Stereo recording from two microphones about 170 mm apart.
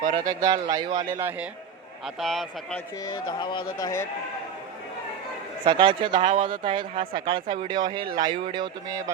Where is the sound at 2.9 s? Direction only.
25° left (ahead or behind).